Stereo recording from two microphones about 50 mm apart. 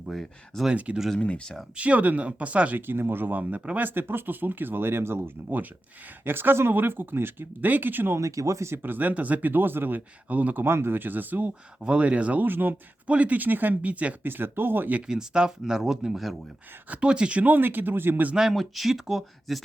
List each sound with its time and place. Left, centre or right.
0.1 s speech: centre
0.7 s speech: right
2.7 s speech: right
8.1 s speech: right
8.7 s speech: right
10.7 s speech: right
11.8 s speech: right
12.5 s speech: right
13.1 s speech: right
14.3 s speech: right
15.0 s speech: centre
16.9 s speech: right
17.4 s speech: right
18.3 s speech: centre